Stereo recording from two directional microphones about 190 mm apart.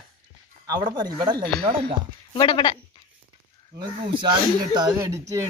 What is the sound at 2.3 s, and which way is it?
Speech, 25° left (ahead or behind).